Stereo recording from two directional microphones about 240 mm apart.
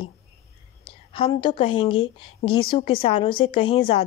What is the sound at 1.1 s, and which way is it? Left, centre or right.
A woman's voice, left.